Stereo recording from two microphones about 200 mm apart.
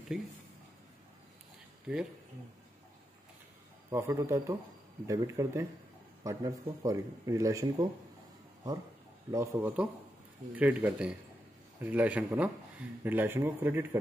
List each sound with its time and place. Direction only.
0.1 s speech: 5° right (ahead or behind)
1.9 s speech: 5° right (ahead or behind)
3.9 s speech: 15° right (ahead or behind)
9.3 s speech: 10° right (ahead or behind)